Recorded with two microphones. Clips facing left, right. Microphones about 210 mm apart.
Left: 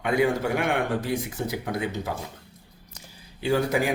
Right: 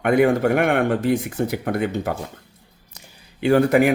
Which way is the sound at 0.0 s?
60° right (ahead or behind).